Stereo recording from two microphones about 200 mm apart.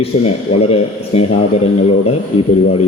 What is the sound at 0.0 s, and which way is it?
Speech, 30° left (ahead or behind).